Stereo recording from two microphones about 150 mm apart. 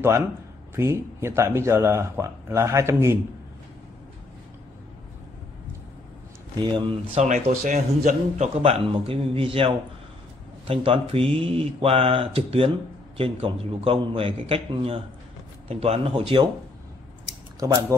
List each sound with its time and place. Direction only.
0.7 s speech: 20° right (ahead or behind)
6.5 s speech: 30° right (ahead or behind)
7.2 s speech: 50° right (ahead or behind)
17.6 s speech: 30° right (ahead or behind)